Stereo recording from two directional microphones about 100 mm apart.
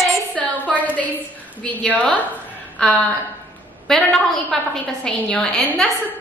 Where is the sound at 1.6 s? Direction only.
15° left (ahead or behind).